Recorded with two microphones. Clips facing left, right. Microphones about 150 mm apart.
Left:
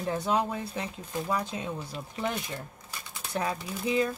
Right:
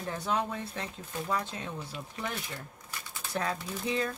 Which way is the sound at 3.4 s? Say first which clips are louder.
Left 2 dB; 10° left (ahead or behind).